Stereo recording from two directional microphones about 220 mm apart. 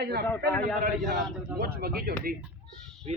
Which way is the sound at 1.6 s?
45° right (ahead or behind).